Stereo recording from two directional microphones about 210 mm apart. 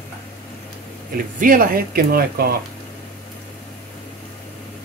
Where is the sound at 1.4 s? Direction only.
40° right (ahead or behind).